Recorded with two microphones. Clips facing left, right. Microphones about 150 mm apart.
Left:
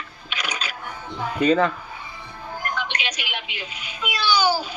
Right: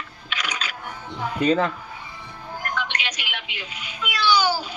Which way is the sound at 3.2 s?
40° left (ahead or behind).